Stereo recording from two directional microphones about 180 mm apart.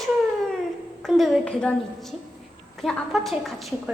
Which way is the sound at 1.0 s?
Centre (ahead or behind).